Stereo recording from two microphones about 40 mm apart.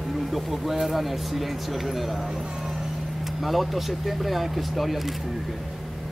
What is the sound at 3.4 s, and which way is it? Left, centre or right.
Speech, centre.